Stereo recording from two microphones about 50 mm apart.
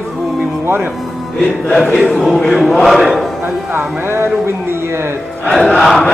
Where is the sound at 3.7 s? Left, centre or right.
Right.